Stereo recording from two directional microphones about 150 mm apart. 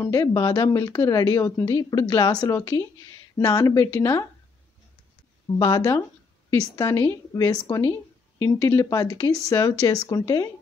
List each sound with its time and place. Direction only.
0.0 s speech: 20° left (ahead or behind)
5.6 s speech: 25° left (ahead or behind)